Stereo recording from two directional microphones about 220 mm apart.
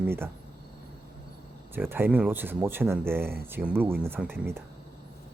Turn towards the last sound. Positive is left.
turn(degrees=-10)  # may be behind; listen again after turning